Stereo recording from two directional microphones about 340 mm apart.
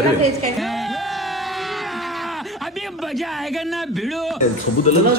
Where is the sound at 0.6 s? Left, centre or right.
Centre.